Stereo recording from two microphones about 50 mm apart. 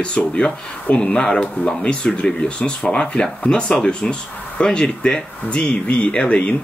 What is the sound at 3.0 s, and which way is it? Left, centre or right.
Speech, centre.